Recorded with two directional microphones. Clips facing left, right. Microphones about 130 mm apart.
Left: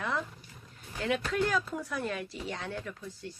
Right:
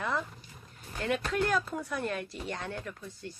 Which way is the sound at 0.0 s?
Centre (ahead or behind).